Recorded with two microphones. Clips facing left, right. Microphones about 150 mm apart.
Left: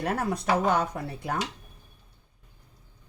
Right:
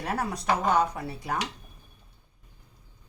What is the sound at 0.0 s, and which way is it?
Speech, 55° left (ahead or behind).